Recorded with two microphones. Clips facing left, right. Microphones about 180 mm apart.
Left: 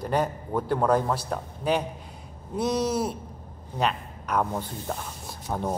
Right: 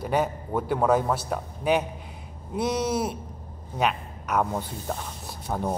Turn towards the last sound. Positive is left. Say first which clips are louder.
# right 1 dB
turn(degrees=-5)  # may be behind; listen again after turning